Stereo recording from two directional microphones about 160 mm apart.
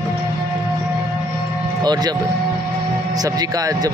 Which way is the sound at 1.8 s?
25° right (ahead or behind).